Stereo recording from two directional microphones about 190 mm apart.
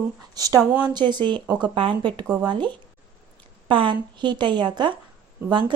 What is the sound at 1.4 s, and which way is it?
Speech, 5° right (ahead or behind).